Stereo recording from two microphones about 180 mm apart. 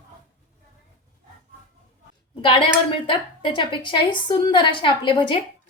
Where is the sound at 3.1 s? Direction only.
25° left (ahead or behind).